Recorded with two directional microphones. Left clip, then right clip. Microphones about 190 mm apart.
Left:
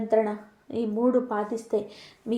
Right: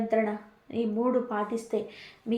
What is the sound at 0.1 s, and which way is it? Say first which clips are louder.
A woman's voice: left 6 dB; 30° left (ahead or behind).